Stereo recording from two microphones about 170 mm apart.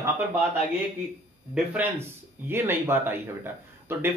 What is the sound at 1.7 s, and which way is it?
Speech, 15° right (ahead or behind).